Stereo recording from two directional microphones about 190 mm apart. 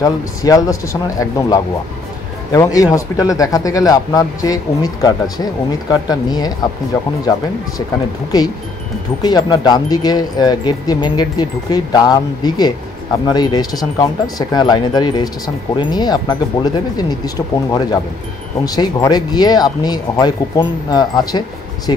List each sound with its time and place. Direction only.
0.0 s speech: 20° left (ahead or behind)
9.2 s speech: 20° left (ahead or behind)